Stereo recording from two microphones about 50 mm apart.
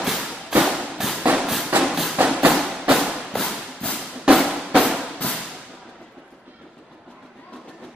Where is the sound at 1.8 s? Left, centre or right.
Centre.